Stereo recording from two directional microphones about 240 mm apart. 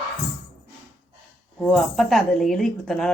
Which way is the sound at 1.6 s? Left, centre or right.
Centre.